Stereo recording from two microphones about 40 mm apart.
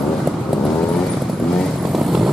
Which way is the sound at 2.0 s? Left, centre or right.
Centre.